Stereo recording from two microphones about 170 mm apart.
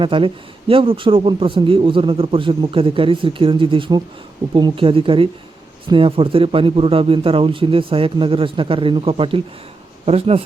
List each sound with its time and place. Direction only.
0.0 s speech: 30° right (ahead or behind)